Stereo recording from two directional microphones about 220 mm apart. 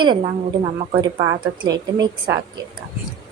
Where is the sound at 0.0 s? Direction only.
20° right (ahead or behind).